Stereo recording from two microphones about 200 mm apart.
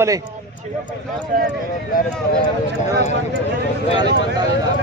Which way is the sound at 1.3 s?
45° right (ahead or behind).